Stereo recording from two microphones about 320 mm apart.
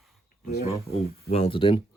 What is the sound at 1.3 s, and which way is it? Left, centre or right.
Speech, centre.